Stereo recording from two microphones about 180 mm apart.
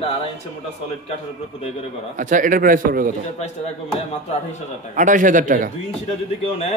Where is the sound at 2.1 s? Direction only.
45° right (ahead or behind).